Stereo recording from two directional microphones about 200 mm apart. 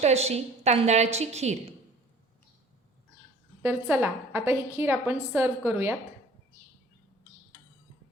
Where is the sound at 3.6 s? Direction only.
10° right (ahead or behind).